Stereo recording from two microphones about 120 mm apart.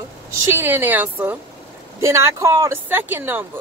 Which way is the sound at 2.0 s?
25° right (ahead or behind).